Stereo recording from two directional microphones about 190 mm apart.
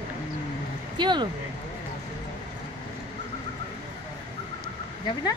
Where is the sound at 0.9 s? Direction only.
25° right (ahead or behind).